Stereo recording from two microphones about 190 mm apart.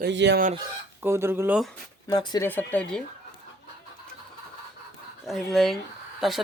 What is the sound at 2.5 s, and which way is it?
Speech, 10° left (ahead or behind).